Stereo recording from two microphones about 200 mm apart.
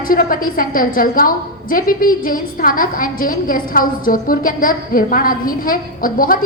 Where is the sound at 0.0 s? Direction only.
45° left (ahead or behind).